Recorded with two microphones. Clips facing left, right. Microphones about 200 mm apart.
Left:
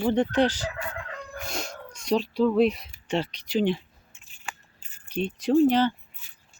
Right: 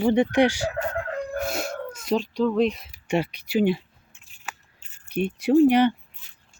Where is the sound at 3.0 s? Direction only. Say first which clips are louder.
Right 3 dB; 10° right (ahead or behind).